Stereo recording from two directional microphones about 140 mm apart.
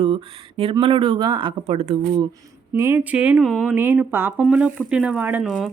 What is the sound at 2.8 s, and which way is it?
Speech, 20° right (ahead or behind).